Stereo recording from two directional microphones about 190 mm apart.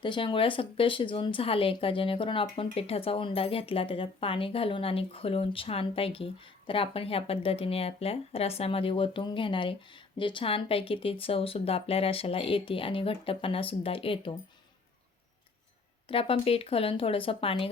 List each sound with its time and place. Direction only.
0.0 s a woman's voice: 25° left (ahead or behind)
16.0 s a woman's voice: 30° left (ahead or behind)